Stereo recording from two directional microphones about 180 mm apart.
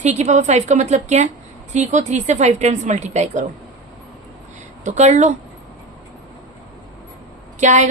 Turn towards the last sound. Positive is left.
turn(degrees=-40)  # may be behind; listen again after turning